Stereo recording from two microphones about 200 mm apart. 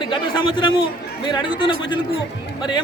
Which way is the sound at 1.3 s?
25° left (ahead or behind).